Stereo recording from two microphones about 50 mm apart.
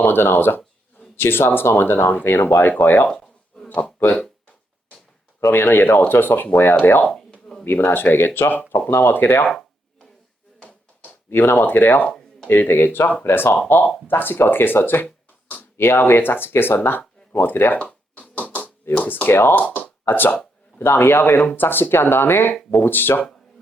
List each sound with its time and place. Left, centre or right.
0.0 s speech: left
3.1 s a sound: centre
5.5 s speech: left
7.0 s a sound: centre
7.6 s speech: left
11.3 s speech: left
15.0 s a sound: left
15.8 s speech: left
18.3 s a sound: left
18.9 s speech: left
19.5 s speech: left
20.1 s speech: left